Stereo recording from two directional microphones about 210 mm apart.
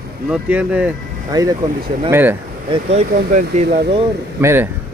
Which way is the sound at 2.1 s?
10° right (ahead or behind).